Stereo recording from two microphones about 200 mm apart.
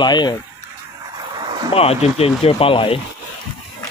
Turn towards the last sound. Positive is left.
turn(degrees=25)  # may be behind; listen again after turning